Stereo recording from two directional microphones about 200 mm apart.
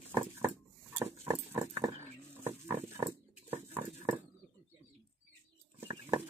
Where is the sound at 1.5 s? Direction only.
15° right (ahead or behind).